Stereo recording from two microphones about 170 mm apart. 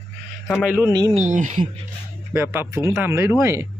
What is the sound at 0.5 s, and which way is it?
Speech, 10° right (ahead or behind).